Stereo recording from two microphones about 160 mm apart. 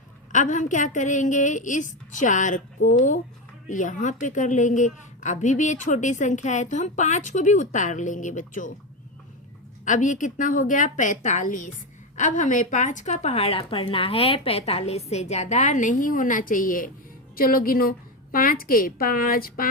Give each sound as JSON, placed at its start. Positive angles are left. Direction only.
{"t": 0.3, "sound": "a woman's voice", "side_deg": 50}
{"t": 9.8, "sound": "a woman's voice", "side_deg": 50}